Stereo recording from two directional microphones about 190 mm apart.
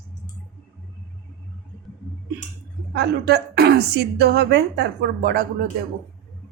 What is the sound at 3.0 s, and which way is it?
A woman's voice, 60° right (ahead or behind).